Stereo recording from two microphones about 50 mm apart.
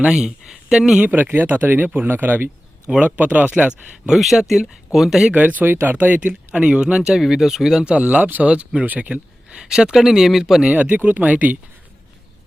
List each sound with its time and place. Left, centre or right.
0.1 s speech: centre
1.0 s speech: right
4.1 s speech: centre
5.3 s speech: right; by 7.9 s centre
7.9 s speech: right
8.2 s speech: right
8.4 s speech: right
9.5 s speech: centre
10.8 s speech: right